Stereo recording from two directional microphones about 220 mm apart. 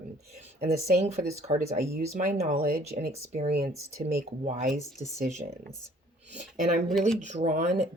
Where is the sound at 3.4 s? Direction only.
45° right (ahead or behind).